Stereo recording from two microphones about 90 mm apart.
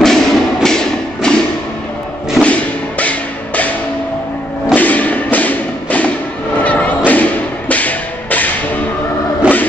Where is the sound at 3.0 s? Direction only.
15° left (ahead or behind).